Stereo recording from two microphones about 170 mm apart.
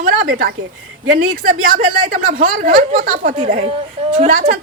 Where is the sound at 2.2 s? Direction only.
55° right (ahead or behind).